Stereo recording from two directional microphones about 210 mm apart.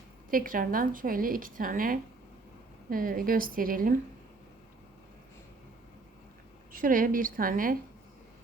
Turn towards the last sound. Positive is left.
turn(degrees=-40)  # may be behind; listen again after turning